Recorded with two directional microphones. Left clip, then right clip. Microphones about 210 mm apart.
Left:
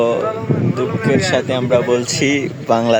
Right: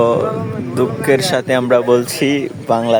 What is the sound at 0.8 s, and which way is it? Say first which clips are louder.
A man's voice: right 5 dB; 30° right (ahead or behind).